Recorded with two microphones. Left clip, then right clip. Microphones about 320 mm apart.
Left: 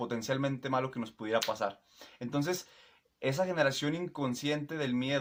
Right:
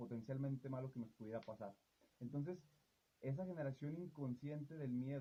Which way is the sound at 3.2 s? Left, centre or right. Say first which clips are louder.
Left 19 dB; right.